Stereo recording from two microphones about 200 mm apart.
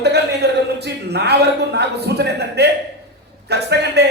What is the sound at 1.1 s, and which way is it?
A man's voice, 55° right (ahead or behind).